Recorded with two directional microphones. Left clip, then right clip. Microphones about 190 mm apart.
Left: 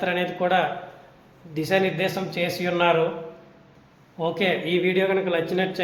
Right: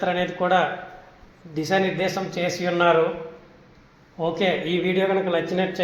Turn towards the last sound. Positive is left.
turn(degrees=-5)  # may be behind; listen again after turning